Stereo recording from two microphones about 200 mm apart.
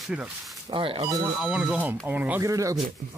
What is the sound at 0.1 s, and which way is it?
Speech, 5° right (ahead or behind).